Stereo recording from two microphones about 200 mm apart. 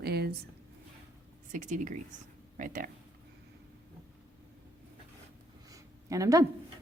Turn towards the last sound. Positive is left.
turn(degrees=-15)  # may be behind; listen again after turning